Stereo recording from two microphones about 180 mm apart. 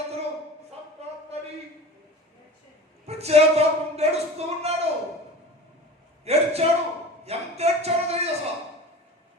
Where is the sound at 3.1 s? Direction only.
35° right (ahead or behind).